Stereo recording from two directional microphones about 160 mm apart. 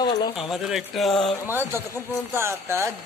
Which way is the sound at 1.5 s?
15° right (ahead or behind).